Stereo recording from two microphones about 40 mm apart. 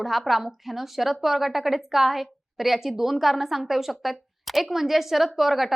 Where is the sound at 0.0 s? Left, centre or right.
Centre.